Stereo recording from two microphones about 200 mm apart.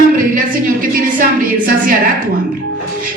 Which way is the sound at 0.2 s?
45° right (ahead or behind).